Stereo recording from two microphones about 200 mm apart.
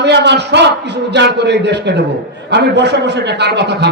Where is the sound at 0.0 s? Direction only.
60° right (ahead or behind).